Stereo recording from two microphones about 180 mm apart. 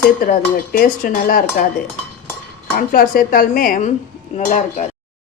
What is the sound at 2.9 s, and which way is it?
Speech, 50° left (ahead or behind).